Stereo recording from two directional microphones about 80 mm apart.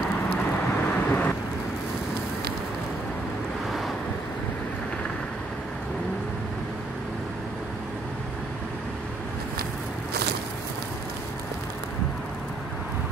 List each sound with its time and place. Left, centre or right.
0.8 s vehicle: centre